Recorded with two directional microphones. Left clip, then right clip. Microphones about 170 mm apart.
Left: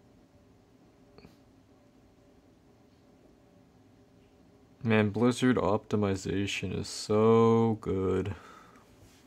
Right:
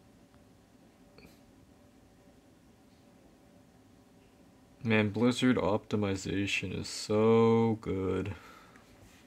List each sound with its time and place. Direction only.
4.8 s speech: 20° left (ahead or behind)